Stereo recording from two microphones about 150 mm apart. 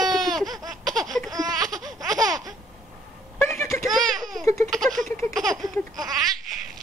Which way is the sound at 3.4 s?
15° left (ahead or behind).